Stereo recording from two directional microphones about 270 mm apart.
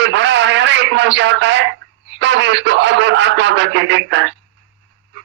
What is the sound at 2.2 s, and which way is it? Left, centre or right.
Speech, right.